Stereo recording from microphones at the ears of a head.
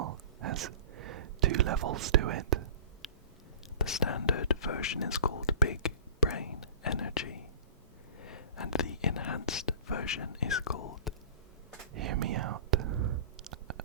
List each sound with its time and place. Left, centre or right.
0.0 s a sound: right
3.8 s whispering: left
8.2 s speech: left
11.9 s whispering: right